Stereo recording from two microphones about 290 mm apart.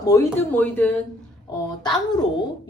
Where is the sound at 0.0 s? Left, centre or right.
Centre.